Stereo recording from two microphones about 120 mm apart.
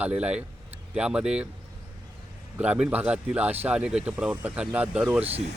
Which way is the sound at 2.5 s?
10° right (ahead or behind).